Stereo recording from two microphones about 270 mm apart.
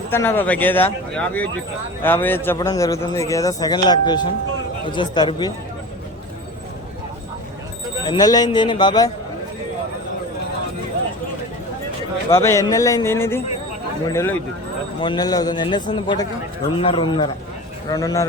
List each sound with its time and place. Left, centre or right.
0.1 s speech: centre
8.0 s speech: centre
12.3 s speech: centre